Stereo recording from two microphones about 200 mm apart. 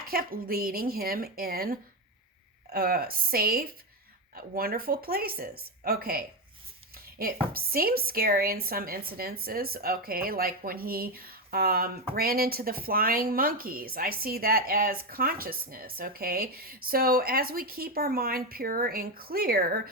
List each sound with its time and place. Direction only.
0.1 s speech: 45° right (ahead or behind)